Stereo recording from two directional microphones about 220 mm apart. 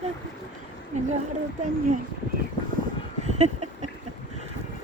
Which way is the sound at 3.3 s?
30° right (ahead or behind).